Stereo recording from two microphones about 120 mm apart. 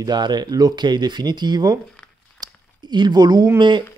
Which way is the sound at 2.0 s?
20° left (ahead or behind).